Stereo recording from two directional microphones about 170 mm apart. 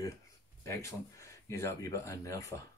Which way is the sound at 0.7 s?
15° left (ahead or behind).